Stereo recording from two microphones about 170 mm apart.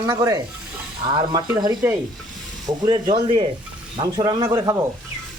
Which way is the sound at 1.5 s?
15° right (ahead or behind).